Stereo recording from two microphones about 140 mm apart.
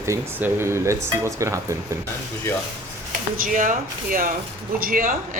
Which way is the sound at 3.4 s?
70° right (ahead or behind).